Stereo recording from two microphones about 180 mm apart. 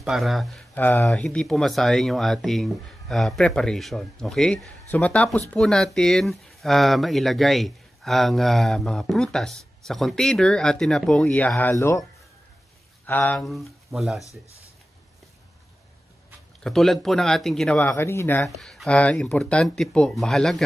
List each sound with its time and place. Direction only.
0.0 s speech: centre (ahead or behind); by 12.0 s 15° left (ahead or behind)
13.0 s speech: 10° left (ahead or behind)
16.6 s speech: centre (ahead or behind)
18.4 s speech: centre (ahead or behind)